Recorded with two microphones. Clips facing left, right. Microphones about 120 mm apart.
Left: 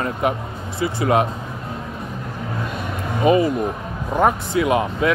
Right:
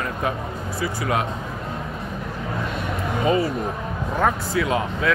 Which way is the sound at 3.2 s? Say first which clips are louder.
Left 5 dB; 20° left (ahead or behind).